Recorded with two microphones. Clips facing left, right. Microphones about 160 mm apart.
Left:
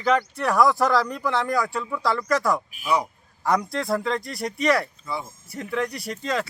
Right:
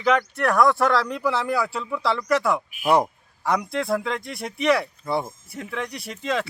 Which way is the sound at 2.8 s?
55° right (ahead or behind).